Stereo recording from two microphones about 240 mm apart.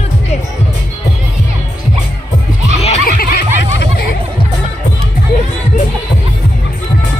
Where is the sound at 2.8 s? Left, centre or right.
Left.